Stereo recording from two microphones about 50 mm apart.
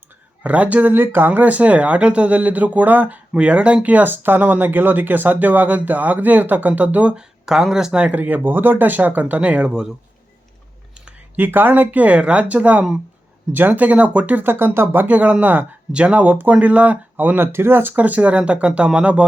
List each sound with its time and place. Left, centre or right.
0.4 s speech: right
0.9 s speech: right
3.3 s speech: right
3.8 s speech: right
7.2 s speech: centre
8.0 s speech: right; by 9.9 s centre
11.3 s speech: right
14.5 s speech: right
15.0 s speech: right
15.9 s speech: right
16.2 s speech: right
17.9 s speech: right